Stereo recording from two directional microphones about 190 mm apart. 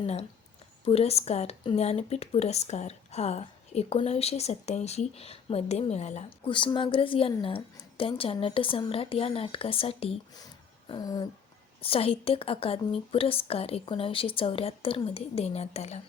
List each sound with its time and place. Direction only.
0.0 s speech: 30° left (ahead or behind)
10.4 s a sound: 20° left (ahead or behind)
11.8 s speech: 30° left (ahead or behind)